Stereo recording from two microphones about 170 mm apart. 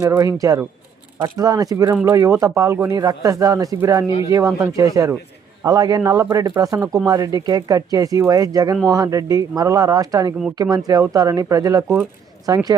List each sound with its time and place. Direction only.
0.0 s speech: 20° right (ahead or behind)